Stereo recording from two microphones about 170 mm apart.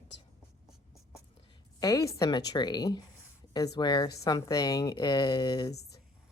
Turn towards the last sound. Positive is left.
turn(degrees=25)  # may be behind; listen again after turning